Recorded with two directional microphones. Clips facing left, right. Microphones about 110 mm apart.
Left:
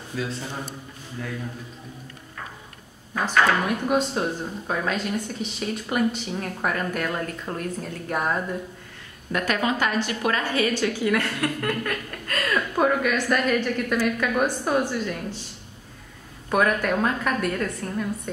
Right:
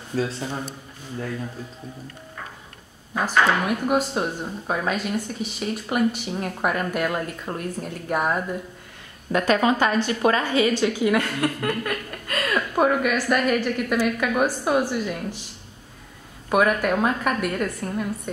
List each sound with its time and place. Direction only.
0.1 s a man's voice: 45° right (ahead or behind)
3.2 s a woman's voice: 10° right (ahead or behind)
9.3 s a woman's voice: 30° right (ahead or behind); by 15.4 s 10° right (ahead or behind)
16.4 s a woman's voice: 5° right (ahead or behind)